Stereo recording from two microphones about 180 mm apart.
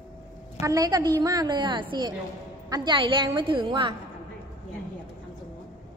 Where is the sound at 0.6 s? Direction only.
20° right (ahead or behind).